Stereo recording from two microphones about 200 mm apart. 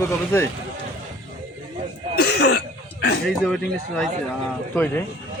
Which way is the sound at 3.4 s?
Centre (ahead or behind).